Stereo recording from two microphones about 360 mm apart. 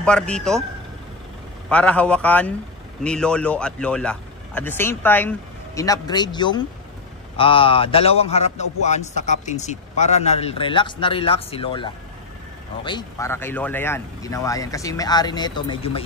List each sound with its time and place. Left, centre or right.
0.0 s speech: centre
1.7 s a man's voice: centre